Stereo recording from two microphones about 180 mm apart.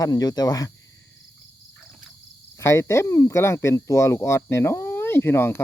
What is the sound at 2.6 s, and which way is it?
Speech, 15° left (ahead or behind).